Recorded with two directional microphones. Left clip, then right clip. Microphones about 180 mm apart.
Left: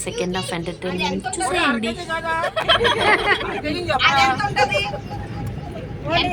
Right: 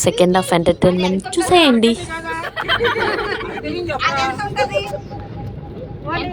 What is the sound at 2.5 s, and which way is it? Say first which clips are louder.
Speech: right 1 dB; 45° left (ahead or behind).